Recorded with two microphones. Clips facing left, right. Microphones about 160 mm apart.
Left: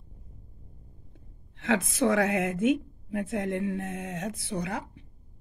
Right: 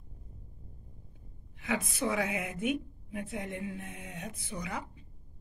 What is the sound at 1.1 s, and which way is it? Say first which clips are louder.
A woman's voice: left 1 dB; 80° left.